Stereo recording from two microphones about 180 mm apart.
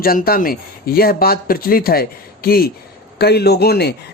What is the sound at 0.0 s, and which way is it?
Speech, 55° left (ahead or behind).